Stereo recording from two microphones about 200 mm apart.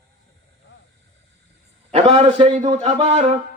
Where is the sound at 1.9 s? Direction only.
30° right (ahead or behind).